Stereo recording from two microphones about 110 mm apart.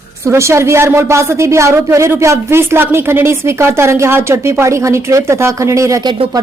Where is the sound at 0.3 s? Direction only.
25° right (ahead or behind).